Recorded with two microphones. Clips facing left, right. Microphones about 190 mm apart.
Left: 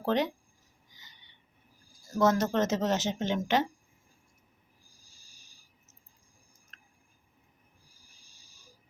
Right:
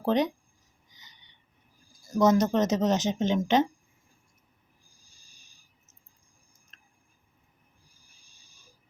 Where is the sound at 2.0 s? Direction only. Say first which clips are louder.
Right 4 dB; 15° right (ahead or behind).